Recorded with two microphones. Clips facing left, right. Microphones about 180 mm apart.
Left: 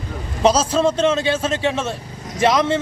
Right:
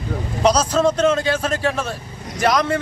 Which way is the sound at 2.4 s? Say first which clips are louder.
Left 2 dB; 25° left (ahead or behind).